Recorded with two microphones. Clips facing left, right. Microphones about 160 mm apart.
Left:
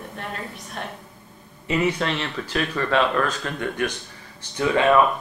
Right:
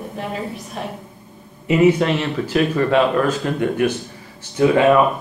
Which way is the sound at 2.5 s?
15° right (ahead or behind).